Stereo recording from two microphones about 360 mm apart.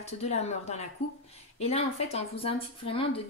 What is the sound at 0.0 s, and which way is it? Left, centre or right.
Speech, centre.